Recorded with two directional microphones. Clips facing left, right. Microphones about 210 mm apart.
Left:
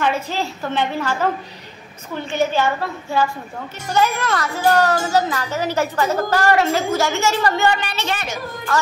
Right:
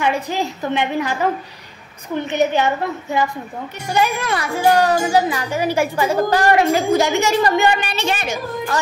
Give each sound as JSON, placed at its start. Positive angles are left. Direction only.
{"t": 0.0, "sound": "a woman's voice", "side_deg": -15}